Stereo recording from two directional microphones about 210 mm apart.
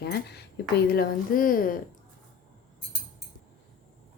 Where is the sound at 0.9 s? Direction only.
40° left (ahead or behind).